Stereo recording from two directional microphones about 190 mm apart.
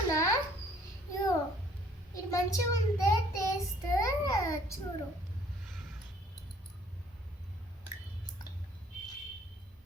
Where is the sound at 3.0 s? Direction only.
20° left (ahead or behind).